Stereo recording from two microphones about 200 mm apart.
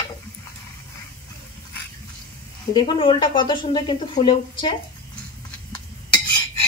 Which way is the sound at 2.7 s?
25° left (ahead or behind).